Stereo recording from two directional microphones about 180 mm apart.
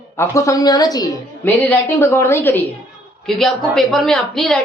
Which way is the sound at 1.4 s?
10° left (ahead or behind).